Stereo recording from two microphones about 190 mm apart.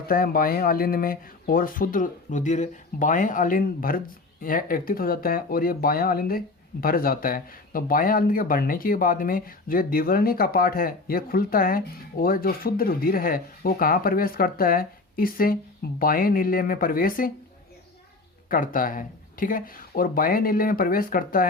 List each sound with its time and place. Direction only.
0.1 s speech: 50° left (ahead or behind)
18.4 s speech: 45° left (ahead or behind)